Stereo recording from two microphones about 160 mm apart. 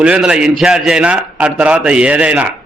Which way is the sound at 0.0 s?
5° right (ahead or behind).